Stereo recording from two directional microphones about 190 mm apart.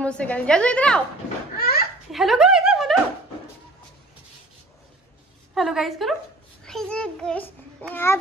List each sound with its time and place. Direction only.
0.0 s a woman's voice: 5° left (ahead or behind)
1.6 s a sound: 55° left (ahead or behind)
2.0 s a woman's voice: centre (ahead or behind)
5.5 s a woman's voice: centre (ahead or behind)